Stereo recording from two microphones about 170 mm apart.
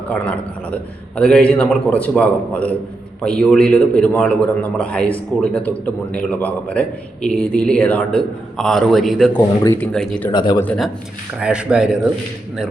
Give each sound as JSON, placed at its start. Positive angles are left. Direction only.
{"t": 0.1, "sound": "a man's voice", "side_deg": 5}
{"t": 10.2, "sound": "speech", "side_deg": 25}
{"t": 11.3, "sound": "a man's voice", "side_deg": -5}